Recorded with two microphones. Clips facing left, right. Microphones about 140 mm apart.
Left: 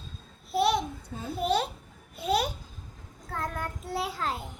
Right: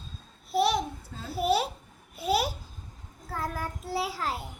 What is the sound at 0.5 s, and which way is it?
Babbling, centre (ahead or behind).